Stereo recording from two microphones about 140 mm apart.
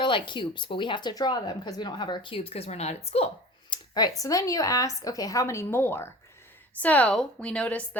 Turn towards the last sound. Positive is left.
turn(degrees=10)  # may be behind; listen again after turning